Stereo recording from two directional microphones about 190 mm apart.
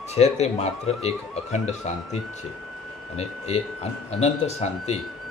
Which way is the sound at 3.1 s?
35° left (ahead or behind).